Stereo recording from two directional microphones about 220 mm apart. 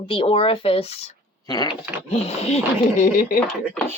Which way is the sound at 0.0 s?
25° left (ahead or behind).